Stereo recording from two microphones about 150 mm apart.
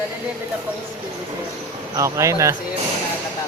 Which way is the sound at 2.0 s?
20° right (ahead or behind).